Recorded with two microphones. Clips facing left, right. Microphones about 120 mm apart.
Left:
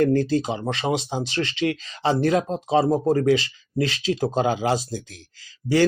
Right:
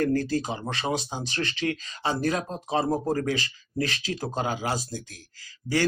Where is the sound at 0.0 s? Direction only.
25° left (ahead or behind).